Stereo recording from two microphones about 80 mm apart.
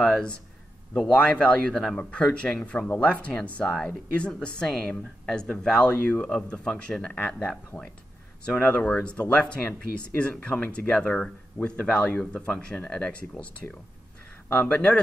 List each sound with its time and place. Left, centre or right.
0.0 s a woman's voice: centre